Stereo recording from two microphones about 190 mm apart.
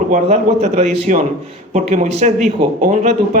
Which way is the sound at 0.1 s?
35° right (ahead or behind).